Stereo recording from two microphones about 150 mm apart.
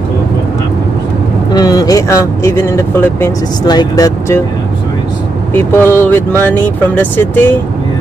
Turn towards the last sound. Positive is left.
turn(degrees=15)  # may be behind; listen again after turning